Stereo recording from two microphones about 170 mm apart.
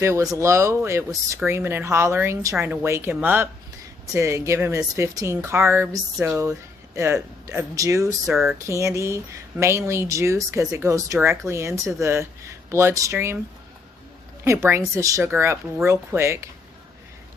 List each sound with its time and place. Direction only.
0.0 s speech: 20° right (ahead or behind)
8.3 s speech: centre (ahead or behind)
8.8 s speech: 15° right (ahead or behind)
14.4 s speech: 15° right (ahead or behind)